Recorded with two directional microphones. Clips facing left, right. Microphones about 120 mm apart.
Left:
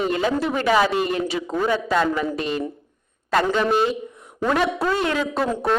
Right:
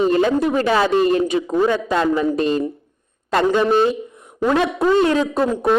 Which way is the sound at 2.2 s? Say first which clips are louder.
Right 6 dB; 40° right (ahead or behind).